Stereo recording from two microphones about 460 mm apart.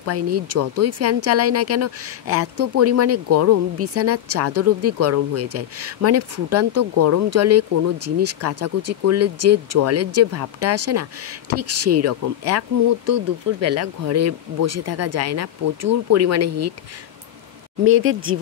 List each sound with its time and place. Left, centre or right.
0.0 s speech: right
17.8 s speech: right